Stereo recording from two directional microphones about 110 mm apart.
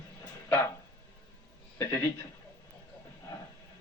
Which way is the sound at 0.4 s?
25° left (ahead or behind).